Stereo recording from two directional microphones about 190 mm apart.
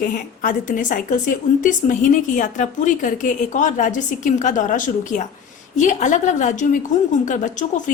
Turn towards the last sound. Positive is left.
turn(degrees=40)  # may be behind; listen again after turning